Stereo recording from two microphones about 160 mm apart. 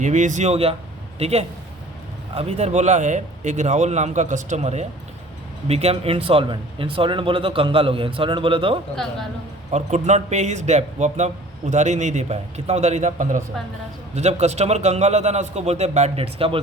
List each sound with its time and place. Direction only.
0.0 s a man's voice: 50° right (ahead or behind); by 8.8 s 35° right (ahead or behind)
9.7 s a man's voice: 45° right (ahead or behind)